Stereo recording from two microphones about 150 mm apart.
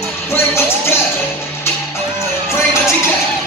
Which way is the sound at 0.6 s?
15° left (ahead or behind).